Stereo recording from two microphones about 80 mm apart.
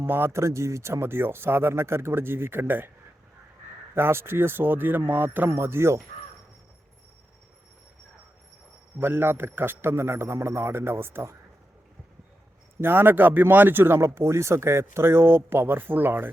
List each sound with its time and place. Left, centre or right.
0.0 s speech: right
3.9 s speech: right
9.0 s speech: right
12.8 s speech: right